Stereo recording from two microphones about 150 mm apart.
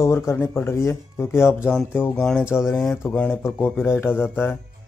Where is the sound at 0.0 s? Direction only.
20° left (ahead or behind).